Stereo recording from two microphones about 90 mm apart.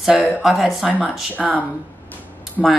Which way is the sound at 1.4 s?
15° left (ahead or behind).